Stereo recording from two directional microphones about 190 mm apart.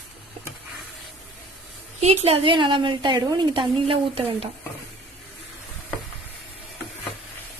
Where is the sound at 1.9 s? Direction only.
35° right (ahead or behind).